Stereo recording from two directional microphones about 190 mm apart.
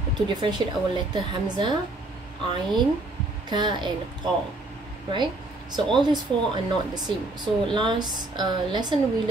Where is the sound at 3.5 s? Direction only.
25° right (ahead or behind).